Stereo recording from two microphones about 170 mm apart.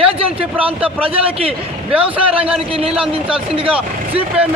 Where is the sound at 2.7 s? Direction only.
35° right (ahead or behind).